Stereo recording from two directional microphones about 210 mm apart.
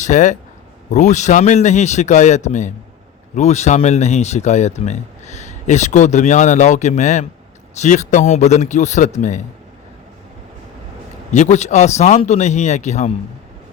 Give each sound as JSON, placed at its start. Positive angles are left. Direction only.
{"t": 0.0, "sound": "speech", "side_deg": 35}
{"t": 11.3, "sound": "speech", "side_deg": 35}